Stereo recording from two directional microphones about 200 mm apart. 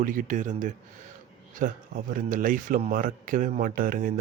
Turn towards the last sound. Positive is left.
turn(degrees=-45)  # may be behind; listen again after turning